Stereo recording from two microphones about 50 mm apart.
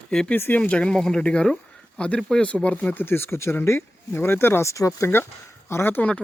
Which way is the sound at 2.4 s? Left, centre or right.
Left.